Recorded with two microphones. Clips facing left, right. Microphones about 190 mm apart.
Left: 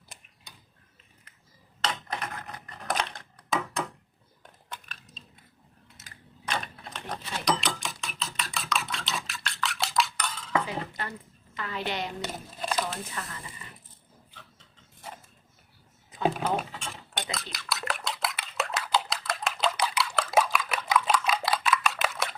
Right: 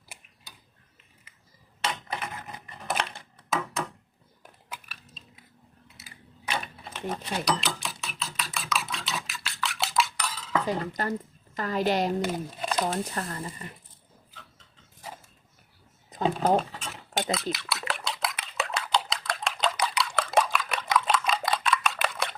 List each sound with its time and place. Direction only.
1.8 s typewriter: 5° right (ahead or behind)
4.4 s a sound: 5° right (ahead or behind)
6.5 s typewriter: 5° right (ahead or behind)
7.3 s speech: 5° right (ahead or behind)
8.0 s a sound: centre (ahead or behind)
10.7 s speech: 40° right (ahead or behind)
12.3 s crumpling: centre (ahead or behind)
12.8 s speech: 40° right (ahead or behind)
16.8 s a sound: 5° right (ahead or behind)